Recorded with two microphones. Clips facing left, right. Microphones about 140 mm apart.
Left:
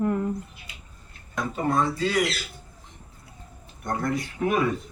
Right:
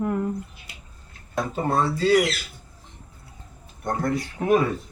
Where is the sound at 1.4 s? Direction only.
30° right (ahead or behind).